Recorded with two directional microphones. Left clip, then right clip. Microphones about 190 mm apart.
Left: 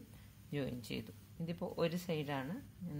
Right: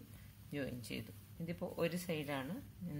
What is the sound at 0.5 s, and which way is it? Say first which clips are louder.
Speech: left 2 dB; 30° left (ahead or behind).